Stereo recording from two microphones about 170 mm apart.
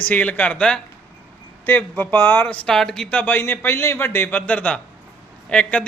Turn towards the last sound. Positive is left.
turn(degrees=5)  # may be behind; listen again after turning